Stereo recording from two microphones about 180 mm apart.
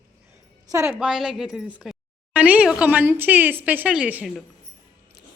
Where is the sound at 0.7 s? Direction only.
15° right (ahead or behind).